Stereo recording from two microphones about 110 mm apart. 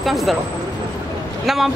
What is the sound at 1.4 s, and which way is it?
Speech, centre (ahead or behind).